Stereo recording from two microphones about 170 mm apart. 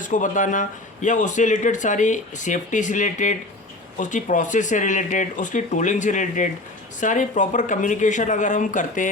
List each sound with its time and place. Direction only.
0.0 s a man's voice: 50° left (ahead or behind)